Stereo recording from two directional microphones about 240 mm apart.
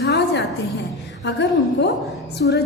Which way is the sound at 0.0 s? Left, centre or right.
Left.